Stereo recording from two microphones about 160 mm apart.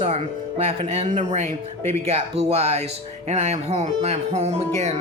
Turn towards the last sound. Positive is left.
turn(degrees=-45)  # may be behind; listen again after turning